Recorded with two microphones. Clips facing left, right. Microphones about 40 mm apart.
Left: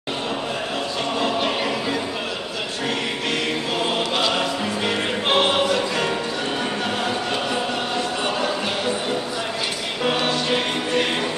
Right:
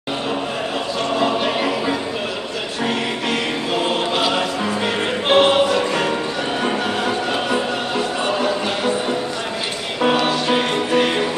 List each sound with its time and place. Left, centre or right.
1.1 s choir: centre
3.3 s music: centre
8.3 s choir: centre
10.1 s music: centre